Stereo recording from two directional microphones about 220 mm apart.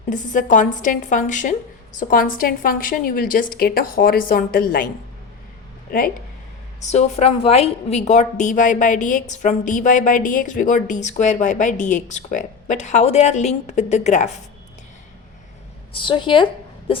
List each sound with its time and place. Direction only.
0.1 s a woman's voice: 35° left (ahead or behind)
6.8 s a woman's voice: 30° left (ahead or behind)
15.9 s speech: 25° left (ahead or behind)